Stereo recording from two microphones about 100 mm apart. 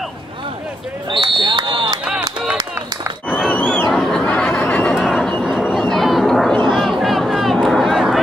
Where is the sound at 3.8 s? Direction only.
5° left (ahead or behind).